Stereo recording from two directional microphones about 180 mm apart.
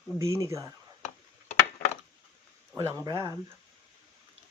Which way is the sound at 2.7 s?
20° right (ahead or behind).